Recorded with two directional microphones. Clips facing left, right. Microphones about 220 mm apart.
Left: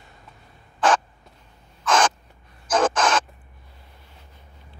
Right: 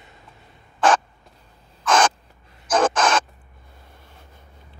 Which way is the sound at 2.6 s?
50° right (ahead or behind).